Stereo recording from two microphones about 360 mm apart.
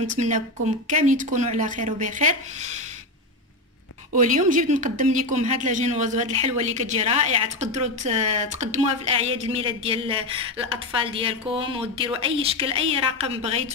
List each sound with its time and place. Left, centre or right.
0.0 s speech: right
4.1 s speech: right